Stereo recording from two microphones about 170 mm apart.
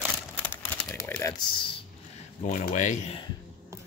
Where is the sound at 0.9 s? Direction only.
15° left (ahead or behind).